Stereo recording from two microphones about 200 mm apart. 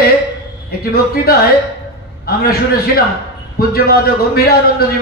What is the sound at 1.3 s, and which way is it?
A man's voice, 50° left (ahead or behind).